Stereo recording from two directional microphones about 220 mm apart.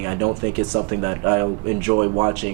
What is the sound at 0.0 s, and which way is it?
Speech, 20° right (ahead or behind).